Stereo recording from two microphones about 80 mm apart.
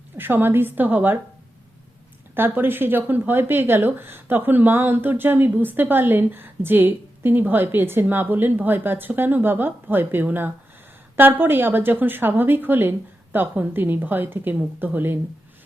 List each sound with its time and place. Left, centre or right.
0.2 s speech: right
2.3 s speech: right